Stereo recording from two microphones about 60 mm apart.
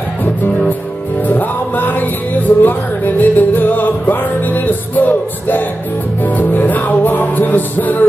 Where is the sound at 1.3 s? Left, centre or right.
Left.